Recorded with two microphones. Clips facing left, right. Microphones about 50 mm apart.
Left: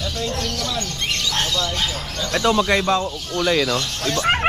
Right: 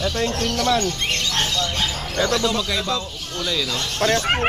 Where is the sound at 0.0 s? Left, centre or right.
Right.